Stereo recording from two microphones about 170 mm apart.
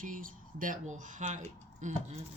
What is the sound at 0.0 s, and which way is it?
Speech, 55° right (ahead or behind).